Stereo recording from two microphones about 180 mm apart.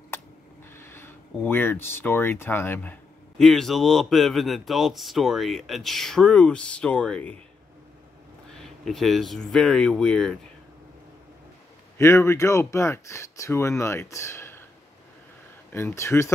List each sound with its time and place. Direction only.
0.7 s speech: 10° left (ahead or behind)
8.5 s speech: centre (ahead or behind)
12.0 s speech: 15° left (ahead or behind)
15.7 s speech: 15° left (ahead or behind)